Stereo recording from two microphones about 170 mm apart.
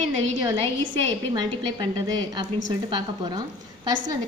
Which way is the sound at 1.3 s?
25° right (ahead or behind).